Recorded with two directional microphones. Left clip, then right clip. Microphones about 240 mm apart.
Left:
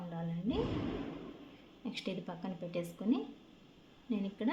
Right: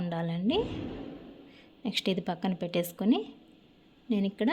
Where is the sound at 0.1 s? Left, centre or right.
Right.